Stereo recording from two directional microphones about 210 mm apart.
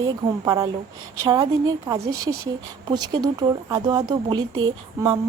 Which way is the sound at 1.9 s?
20° right (ahead or behind).